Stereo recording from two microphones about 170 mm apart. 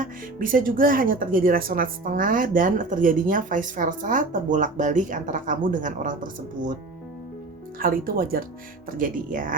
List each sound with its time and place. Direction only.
0.0 s speech: 55° right (ahead or behind)
7.8 s speech: 55° right (ahead or behind)